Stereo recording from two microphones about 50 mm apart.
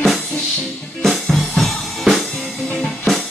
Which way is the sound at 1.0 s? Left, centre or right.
Centre.